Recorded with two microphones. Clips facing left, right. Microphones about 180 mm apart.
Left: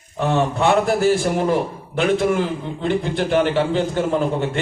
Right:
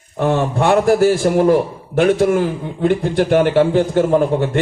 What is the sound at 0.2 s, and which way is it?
A man's voice, 50° right (ahead or behind).